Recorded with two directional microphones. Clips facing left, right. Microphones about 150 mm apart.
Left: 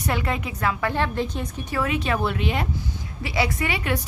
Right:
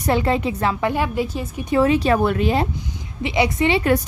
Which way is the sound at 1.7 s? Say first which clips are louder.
Right 9 dB; 30° right (ahead or behind).